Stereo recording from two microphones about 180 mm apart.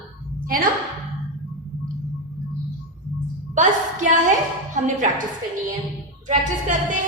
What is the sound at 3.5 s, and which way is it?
A woman's voice, 45° right (ahead or behind).